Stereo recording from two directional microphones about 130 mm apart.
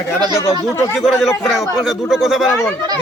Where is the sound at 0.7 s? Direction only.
20° left (ahead or behind).